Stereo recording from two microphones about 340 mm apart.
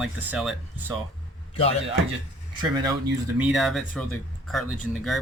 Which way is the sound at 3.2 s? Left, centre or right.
Centre.